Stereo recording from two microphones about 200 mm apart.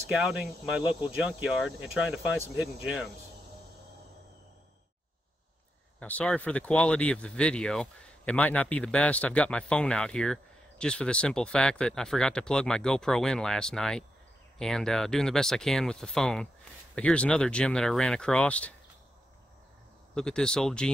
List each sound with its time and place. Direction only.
0.1 s speech: 5° right (ahead or behind)
5.9 s speech: 5° left (ahead or behind)
20.2 s speech: 5° left (ahead or behind)